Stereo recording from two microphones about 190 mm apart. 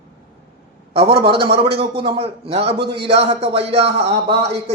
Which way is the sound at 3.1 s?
35° right (ahead or behind).